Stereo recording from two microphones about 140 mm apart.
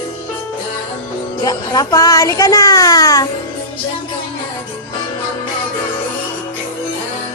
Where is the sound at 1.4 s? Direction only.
30° left (ahead or behind).